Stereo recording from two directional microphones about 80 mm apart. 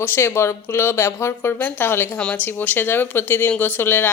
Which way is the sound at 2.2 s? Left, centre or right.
Centre.